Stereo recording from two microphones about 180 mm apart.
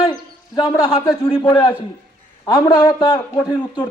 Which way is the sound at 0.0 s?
25° left (ahead or behind).